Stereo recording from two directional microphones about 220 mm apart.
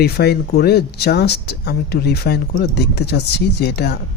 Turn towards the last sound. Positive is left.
turn(degrees=50)  # may be behind; listen again after turning